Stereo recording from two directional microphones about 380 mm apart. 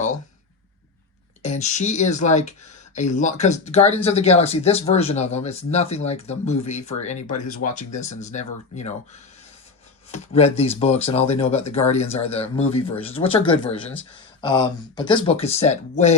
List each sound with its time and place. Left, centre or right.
1.4 s speech: centre
10.1 s speech: centre